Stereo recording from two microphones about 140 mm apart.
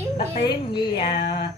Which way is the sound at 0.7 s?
35° left (ahead or behind).